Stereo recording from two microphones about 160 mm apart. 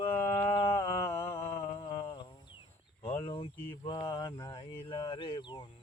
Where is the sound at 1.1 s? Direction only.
35° left (ahead or behind).